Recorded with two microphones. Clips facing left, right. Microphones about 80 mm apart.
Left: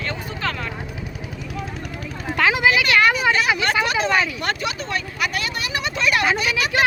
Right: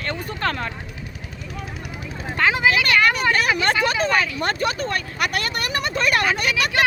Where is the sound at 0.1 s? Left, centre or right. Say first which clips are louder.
Right 5 dB; right.